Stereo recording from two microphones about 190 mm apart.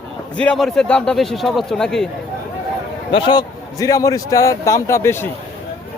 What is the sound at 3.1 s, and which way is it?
A man's voice, 25° left (ahead or behind).